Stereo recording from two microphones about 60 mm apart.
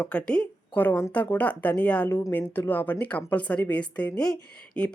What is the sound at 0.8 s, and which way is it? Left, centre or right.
Speech, left.